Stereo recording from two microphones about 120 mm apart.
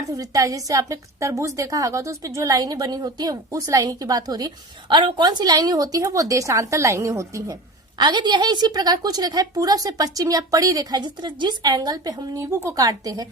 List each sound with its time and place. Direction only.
0.1 s a woman's voice: 30° right (ahead or behind)